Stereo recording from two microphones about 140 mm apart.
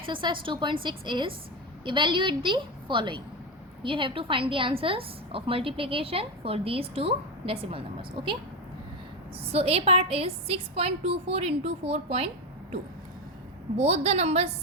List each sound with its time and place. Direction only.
0.0 s a woman's voice: 35° right (ahead or behind)
9.4 s a woman's voice: 45° right (ahead or behind)
13.7 s a woman's voice: 50° right (ahead or behind)